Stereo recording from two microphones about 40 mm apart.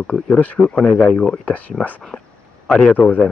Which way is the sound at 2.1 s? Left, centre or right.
Left.